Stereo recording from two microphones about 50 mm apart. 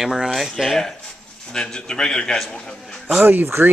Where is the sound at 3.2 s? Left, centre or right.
Right.